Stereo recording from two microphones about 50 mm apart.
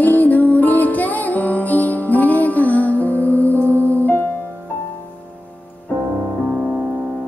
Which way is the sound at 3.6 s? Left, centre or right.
Right.